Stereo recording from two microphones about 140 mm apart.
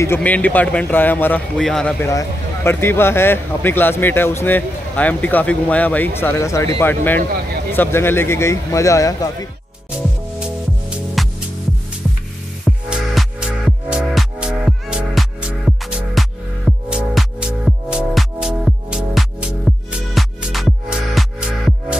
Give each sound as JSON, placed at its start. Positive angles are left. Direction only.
{"t": 0.0, "sound": "speech", "side_deg": 15}
{"t": 2.0, "sound": "speech", "side_deg": 20}
{"t": 11.2, "sound": "music", "side_deg": 0}
{"t": 12.6, "sound": "music", "side_deg": 0}